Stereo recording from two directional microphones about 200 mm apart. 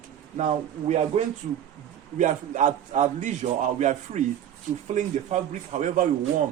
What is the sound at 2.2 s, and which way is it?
A man's voice, 40° right (ahead or behind).